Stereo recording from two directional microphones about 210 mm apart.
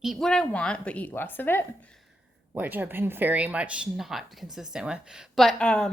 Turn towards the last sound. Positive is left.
turn(degrees=5)  # may be behind; listen again after turning